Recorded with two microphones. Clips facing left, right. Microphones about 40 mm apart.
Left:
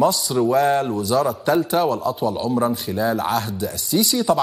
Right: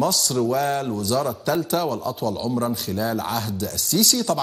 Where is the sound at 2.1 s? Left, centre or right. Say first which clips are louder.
Left 3 dB; centre.